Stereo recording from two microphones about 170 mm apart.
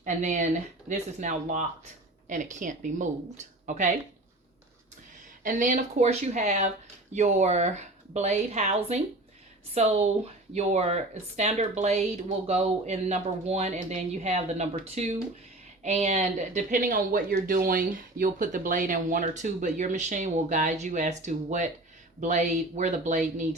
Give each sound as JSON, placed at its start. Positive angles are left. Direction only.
{"t": 0.0, "sound": "speech", "side_deg": -45}
{"t": 5.4, "sound": "speech", "side_deg": -50}